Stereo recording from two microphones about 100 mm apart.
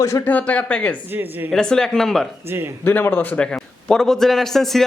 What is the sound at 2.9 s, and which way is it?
A man's voice, 20° left (ahead or behind).